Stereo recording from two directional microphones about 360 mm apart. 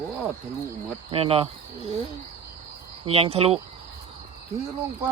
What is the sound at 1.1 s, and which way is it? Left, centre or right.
Speech, centre.